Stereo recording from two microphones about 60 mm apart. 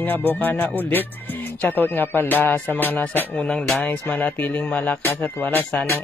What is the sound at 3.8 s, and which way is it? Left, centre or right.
Speech, left.